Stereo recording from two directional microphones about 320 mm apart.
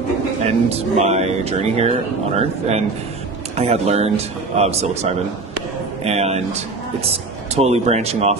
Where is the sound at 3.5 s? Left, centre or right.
Centre.